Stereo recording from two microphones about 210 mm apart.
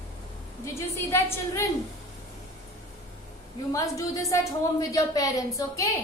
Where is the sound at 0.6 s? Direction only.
15° left (ahead or behind).